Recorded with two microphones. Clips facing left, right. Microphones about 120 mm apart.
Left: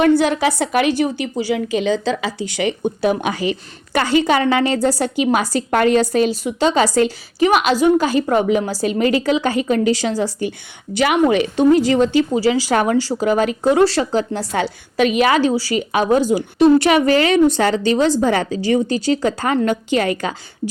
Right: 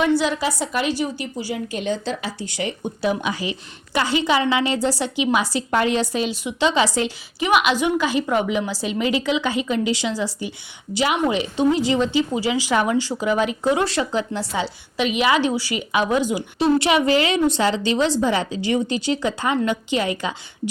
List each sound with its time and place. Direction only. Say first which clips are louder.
0.0 s a woman's voice: left 5 dB; 55° left (ahead or behind); by 2.9 s 85° left
3.0 s a woman's voice: left 3 dB; 55° left (ahead or behind)
10.9 s a woman's voice: left 5 dB; 60° left (ahead or behind)
12.3 s speech: left 5 dB; 35° left (ahead or behind)
14.5 s a woman's voice: left 7 dB; 50° left (ahead or behind)